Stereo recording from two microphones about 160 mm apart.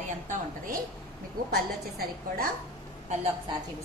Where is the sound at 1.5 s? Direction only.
70° right (ahead or behind).